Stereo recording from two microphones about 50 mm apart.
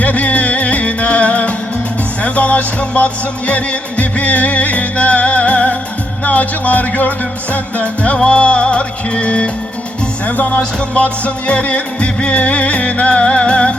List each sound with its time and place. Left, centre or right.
0.0 s music: left